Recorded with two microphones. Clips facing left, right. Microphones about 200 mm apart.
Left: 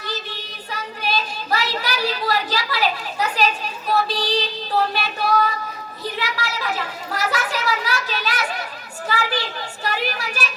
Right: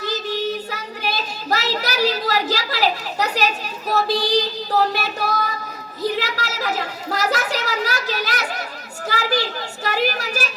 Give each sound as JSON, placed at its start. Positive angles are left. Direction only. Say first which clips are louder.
{"t": 0.7, "sound": "a woman's voice", "louder": "left 1 dB", "side_deg": -40}